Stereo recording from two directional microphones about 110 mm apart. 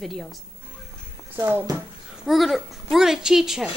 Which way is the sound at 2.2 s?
Centre (ahead or behind).